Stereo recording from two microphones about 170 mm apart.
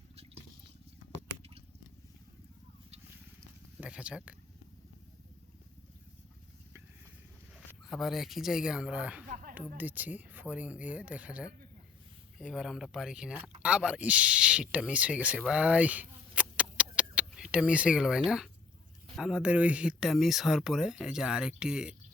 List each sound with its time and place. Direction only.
3.8 s speech: 5° right (ahead or behind)
7.5 s speech: centre (ahead or behind)
9.3 s a sound: 55° right (ahead or behind)
9.6 s speech: 10° right (ahead or behind)
15.4 s a sound: 5° right (ahead or behind)
19.1 s speech: 5° right (ahead or behind)